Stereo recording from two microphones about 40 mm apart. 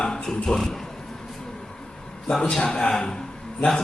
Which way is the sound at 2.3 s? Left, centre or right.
Centre.